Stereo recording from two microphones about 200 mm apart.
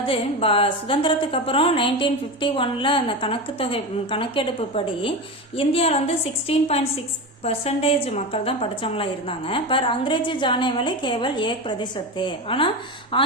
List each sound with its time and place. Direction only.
0.0 s a woman's voice: 30° left (ahead or behind)